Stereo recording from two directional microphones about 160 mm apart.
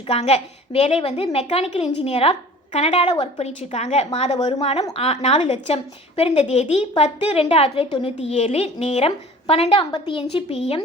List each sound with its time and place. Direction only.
0.1 s a woman's voice: 40° left (ahead or behind)